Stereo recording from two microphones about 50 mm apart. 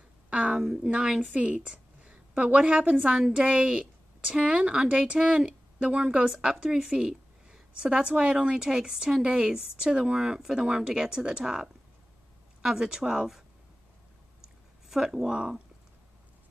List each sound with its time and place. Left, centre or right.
0.3 s a woman's voice: right
14.4 s a sound: centre
15.3 s speech: centre